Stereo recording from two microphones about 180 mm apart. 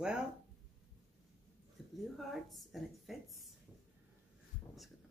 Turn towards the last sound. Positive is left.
turn(degrees=0)  # may be behind; listen again after turning